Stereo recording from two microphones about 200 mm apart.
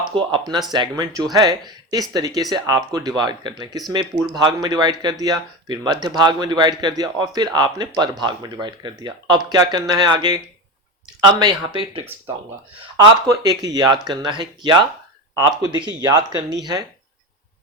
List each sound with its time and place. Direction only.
0.0 s speech: 25° right (ahead or behind)
13.2 s speech: 20° right (ahead or behind)